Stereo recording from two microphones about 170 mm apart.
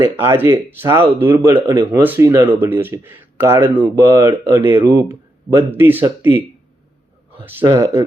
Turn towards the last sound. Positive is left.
turn(degrees=-15)  # may be behind; listen again after turning